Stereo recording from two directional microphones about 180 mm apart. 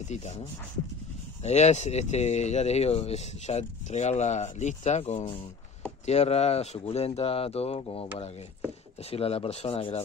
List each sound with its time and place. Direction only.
0.1 s speech: 40° left (ahead or behind)
9.1 s speech: 35° left (ahead or behind)